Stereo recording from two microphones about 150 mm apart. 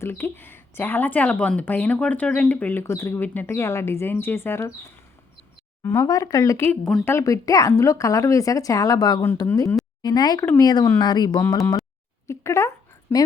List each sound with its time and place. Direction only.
0.0 s speech: 15° left (ahead or behind)